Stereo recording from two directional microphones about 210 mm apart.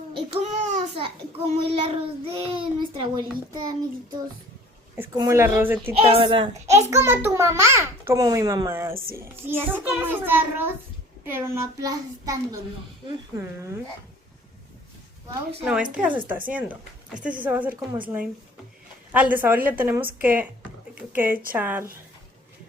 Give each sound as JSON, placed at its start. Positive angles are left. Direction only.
{"t": 0.5, "sound": "a child's voice", "side_deg": -35}
{"t": 6.1, "sound": "a child's voice", "side_deg": -25}
{"t": 6.9, "sound": "a child's voice", "side_deg": -10}
{"t": 16.0, "sound": "a child's voice", "side_deg": -5}